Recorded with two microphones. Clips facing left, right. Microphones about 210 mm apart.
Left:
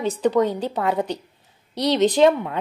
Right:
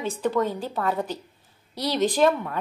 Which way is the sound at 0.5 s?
20° left (ahead or behind).